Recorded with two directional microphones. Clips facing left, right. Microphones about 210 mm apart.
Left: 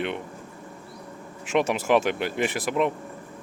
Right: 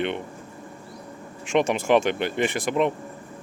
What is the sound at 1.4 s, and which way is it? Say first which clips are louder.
Speech: right 2 dB; 5° left (ahead or behind).